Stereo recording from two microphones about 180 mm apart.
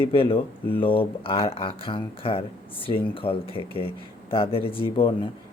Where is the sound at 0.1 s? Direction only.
30° left (ahead or behind).